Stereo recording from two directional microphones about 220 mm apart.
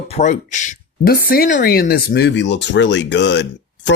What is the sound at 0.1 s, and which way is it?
A woman's voice, 35° left (ahead or behind).